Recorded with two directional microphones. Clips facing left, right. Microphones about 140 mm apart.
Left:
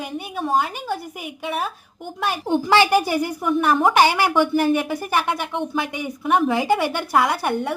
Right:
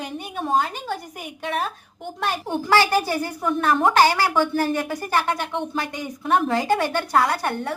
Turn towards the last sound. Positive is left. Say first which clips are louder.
# left 2 dB
turn(degrees=15)  # may be behind; listen again after turning